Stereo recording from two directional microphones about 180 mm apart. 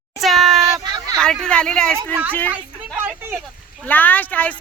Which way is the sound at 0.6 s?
20° right (ahead or behind).